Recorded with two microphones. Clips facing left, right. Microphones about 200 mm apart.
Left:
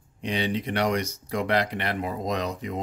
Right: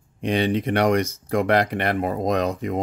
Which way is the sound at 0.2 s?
55° right (ahead or behind).